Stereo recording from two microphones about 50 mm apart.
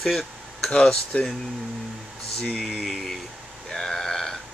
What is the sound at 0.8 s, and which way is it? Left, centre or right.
Speech, centre.